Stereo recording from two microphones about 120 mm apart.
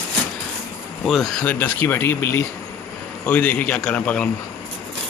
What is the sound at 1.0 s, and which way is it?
Speech, centre (ahead or behind).